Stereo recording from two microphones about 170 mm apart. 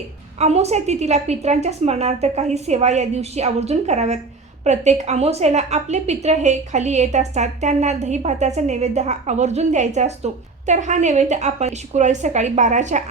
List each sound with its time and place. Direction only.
0.3 s a woman's voice: 40° right (ahead or behind)